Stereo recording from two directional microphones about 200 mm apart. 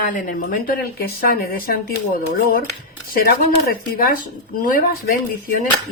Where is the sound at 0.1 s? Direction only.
40° left (ahead or behind).